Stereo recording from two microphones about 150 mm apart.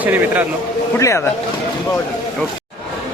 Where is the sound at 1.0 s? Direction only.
20° left (ahead or behind).